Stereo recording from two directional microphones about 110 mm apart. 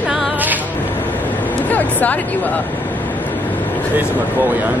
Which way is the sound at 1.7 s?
15° left (ahead or behind).